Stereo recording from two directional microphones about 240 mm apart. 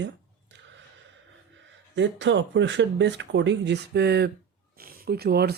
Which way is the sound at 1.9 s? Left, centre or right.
Right.